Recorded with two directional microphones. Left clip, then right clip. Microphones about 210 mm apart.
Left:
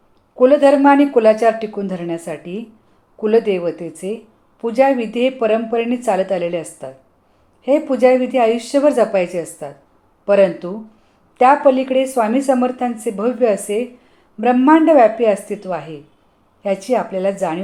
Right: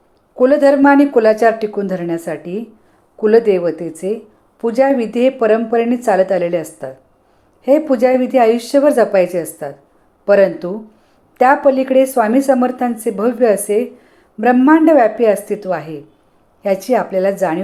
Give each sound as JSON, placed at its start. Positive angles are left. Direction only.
{"t": 0.3, "sound": "a woman's voice", "side_deg": -15}